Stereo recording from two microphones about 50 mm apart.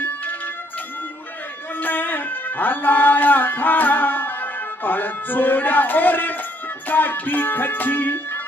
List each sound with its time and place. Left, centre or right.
0.0 s music: left
1.8 s music: left